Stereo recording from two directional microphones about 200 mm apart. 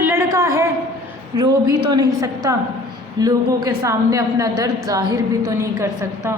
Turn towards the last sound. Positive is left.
turn(degrees=-15)  # may be behind; listen again after turning